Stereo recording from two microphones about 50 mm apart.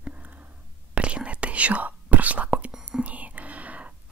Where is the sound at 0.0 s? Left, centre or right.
Right.